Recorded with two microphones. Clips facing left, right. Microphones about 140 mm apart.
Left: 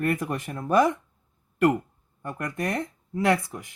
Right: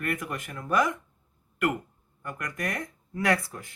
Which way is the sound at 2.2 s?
30° left (ahead or behind).